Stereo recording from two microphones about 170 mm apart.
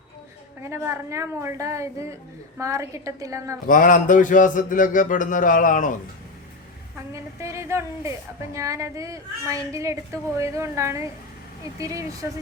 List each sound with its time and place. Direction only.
0.7 s a woman's voice: 15° right (ahead or behind)
3.7 s a man's voice: 50° left (ahead or behind)
7.1 s a woman's voice: 15° right (ahead or behind)